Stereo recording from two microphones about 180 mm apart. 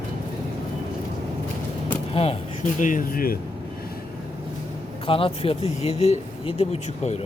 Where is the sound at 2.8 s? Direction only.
50° left (ahead or behind).